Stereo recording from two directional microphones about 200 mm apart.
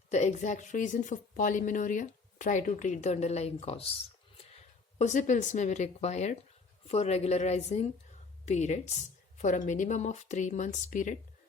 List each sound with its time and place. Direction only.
0.1 s a woman's voice: 35° left (ahead or behind)